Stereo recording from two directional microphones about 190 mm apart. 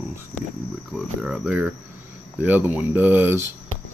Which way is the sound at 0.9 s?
Centre (ahead or behind).